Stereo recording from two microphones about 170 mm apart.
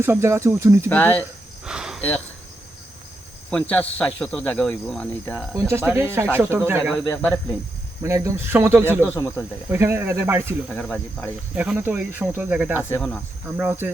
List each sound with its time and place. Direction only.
0.0 s speech: 15° right (ahead or behind)
0.9 s speech: 10° left (ahead or behind)
1.6 s cricket: 5° right (ahead or behind)
2.0 s speech: 10° left (ahead or behind)
3.5 s speech: 10° left (ahead or behind)
5.5 s speech: 15° right (ahead or behind)
7.1 s speech: 5° left (ahead or behind)
8.0 s speech: 15° right (ahead or behind)
9.0 s speech: 15° left (ahead or behind)
9.6 s speech: 15° right (ahead or behind)
10.7 s speech: 5° left (ahead or behind)
11.5 s speech: 10° right (ahead or behind)
13.0 s speech: 5° left (ahead or behind)
13.6 s speech: 10° right (ahead or behind)